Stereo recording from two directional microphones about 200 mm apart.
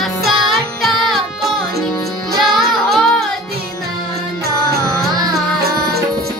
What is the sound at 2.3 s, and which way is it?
Music, centre (ahead or behind).